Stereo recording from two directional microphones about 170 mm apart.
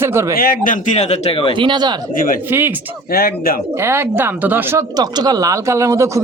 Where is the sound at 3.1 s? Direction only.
60° left (ahead or behind).